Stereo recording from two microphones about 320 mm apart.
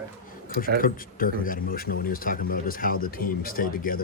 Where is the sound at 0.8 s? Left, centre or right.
Left.